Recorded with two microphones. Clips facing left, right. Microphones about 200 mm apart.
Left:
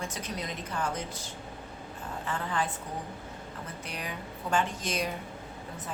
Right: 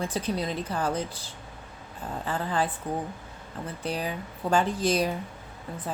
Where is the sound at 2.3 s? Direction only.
35° right (ahead or behind).